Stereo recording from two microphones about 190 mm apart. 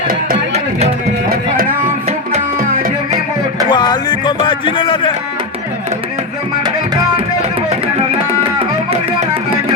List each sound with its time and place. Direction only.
2.0 s music: 35° right (ahead or behind)
3.7 s speech: 25° left (ahead or behind)
7.7 s music: 30° right (ahead or behind)